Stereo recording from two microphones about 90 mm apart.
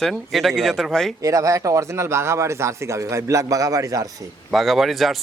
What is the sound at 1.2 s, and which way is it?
Speech, 40° right (ahead or behind).